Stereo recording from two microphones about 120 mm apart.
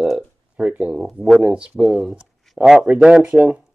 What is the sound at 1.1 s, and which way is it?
Speech, centre (ahead or behind).